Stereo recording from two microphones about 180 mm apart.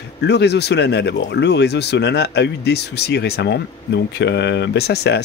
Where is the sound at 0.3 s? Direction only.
70° left (ahead or behind).